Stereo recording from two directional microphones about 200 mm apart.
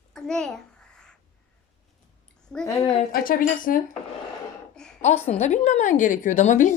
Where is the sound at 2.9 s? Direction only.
40° left (ahead or behind).